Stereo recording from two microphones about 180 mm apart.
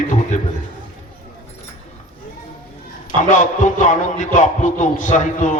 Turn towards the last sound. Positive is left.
turn(degrees=40)  # may be behind; listen again after turning